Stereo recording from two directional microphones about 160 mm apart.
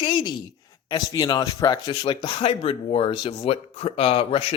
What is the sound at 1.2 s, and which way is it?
Speech, 25° left (ahead or behind).